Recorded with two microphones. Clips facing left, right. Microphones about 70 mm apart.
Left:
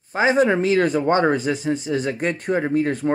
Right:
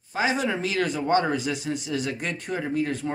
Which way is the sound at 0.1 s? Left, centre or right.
Left.